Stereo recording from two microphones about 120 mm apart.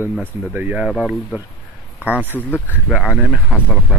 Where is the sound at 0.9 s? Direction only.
Centre (ahead or behind).